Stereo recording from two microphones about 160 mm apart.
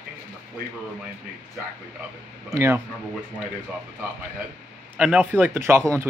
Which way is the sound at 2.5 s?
15° right (ahead or behind).